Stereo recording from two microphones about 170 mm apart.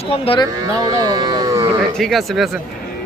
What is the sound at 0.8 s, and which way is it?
Speech, 25° right (ahead or behind).